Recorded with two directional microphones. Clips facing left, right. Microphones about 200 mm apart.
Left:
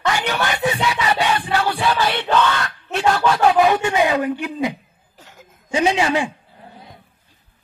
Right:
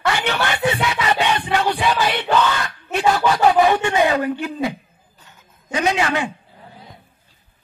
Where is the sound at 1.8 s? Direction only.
10° right (ahead or behind); by 4.7 s 15° left (ahead or behind).